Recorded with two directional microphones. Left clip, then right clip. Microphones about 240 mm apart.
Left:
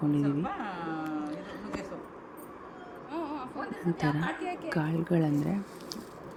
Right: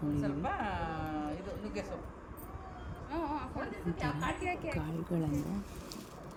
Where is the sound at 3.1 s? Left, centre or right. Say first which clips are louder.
Left 1 dB; centre.